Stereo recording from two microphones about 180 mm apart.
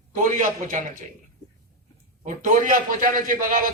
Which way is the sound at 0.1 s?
45° right (ahead or behind).